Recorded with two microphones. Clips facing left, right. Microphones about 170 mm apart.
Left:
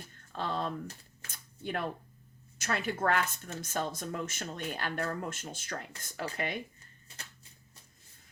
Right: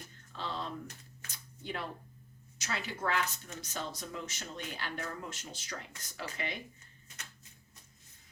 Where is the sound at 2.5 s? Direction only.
55° left (ahead or behind).